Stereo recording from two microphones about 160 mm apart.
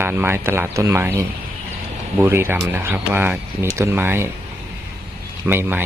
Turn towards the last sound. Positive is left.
turn(degrees=-15)  # may be behind; listen again after turning